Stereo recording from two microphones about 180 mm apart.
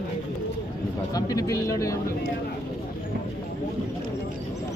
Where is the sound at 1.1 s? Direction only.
20° left (ahead or behind).